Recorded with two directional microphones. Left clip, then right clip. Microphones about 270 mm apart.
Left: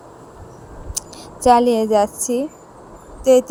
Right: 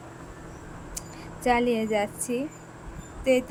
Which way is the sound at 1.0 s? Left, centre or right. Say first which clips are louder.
Left 12 dB; centre.